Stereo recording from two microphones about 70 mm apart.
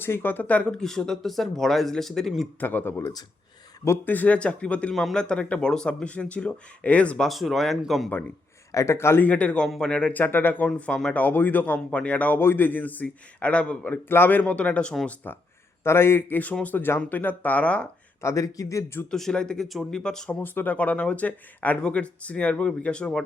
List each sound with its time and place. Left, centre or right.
0.0 s speech: left; by 2.5 s centre
2.6 s speech: left
7.3 s speech: centre
8.7 s a man's voice: left
9.2 s speech: centre
10.8 s speech: centre
11.2 s speech: left
14.1 s speech: left
15.0 s a man's voice: left
18.2 s speech: left
19.1 s speech: centre
20.4 s speech: left